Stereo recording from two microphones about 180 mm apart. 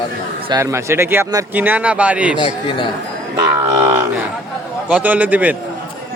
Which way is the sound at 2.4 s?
25° left (ahead or behind).